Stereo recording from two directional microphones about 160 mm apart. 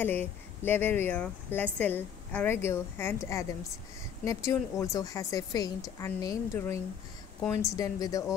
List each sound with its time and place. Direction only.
0.0 s speech: 15° left (ahead or behind)